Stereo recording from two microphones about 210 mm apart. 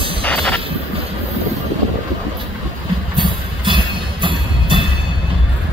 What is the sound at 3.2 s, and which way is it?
Music, 25° right (ahead or behind).